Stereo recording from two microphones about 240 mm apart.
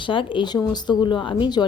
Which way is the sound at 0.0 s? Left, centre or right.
Left.